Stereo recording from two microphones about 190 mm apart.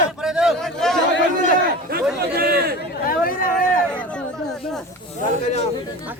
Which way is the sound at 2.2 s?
55° right (ahead or behind).